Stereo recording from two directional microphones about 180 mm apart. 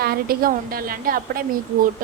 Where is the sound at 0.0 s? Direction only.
55° right (ahead or behind).